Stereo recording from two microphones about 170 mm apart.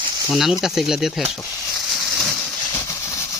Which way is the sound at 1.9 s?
Centre (ahead or behind).